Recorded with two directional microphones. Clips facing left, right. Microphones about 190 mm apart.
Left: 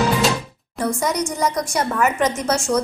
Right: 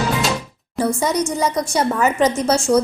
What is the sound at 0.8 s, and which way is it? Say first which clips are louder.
A woman's voice: right 2 dB; 25° right (ahead or behind).